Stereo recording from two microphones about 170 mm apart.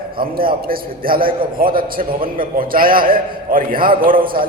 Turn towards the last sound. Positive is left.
turn(degrees=-55)  # may be behind; listen again after turning